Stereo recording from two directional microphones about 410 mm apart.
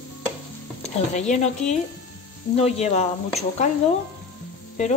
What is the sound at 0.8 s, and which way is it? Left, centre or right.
Stir, centre.